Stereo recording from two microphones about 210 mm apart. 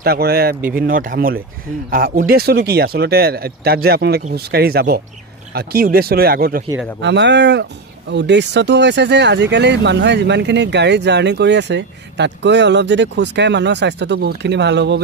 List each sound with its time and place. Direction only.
0.0 s speech: 50° right (ahead or behind)
0.6 s speech: 10° right (ahead or behind)
0.8 s speech: 40° right (ahead or behind)
7.0 s speech: 55° right (ahead or behind)